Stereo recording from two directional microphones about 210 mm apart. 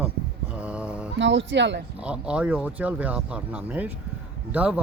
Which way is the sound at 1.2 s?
60° right (ahead or behind).